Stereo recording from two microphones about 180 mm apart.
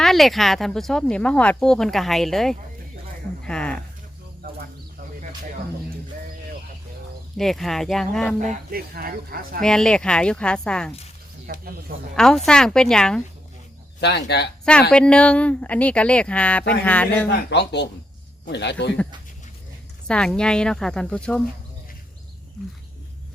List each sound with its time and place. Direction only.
0.0 s speech: centre (ahead or behind)
3.4 s a sound: 5° left (ahead or behind)
7.3 s speech: centre (ahead or behind)
8.4 s speech: 40° right (ahead or behind)
8.9 s speech: 55° right (ahead or behind)
9.6 s speech: 5° left (ahead or behind)
11.5 s speech: 55° right (ahead or behind)
12.1 s speech: 5° left (ahead or behind)
14.0 s speech: 70° left (ahead or behind)
14.6 s speech: 5° left (ahead or behind)
17.5 s speech: 70° left (ahead or behind)
20.1 s speech: 5° left (ahead or behind)